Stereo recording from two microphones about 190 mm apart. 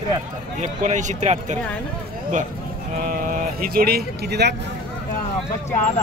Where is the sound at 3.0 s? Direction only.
45° right (ahead or behind).